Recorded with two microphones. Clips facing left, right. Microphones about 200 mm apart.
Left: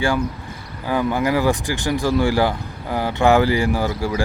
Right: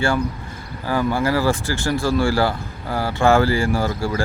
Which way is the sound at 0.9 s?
15° left (ahead or behind).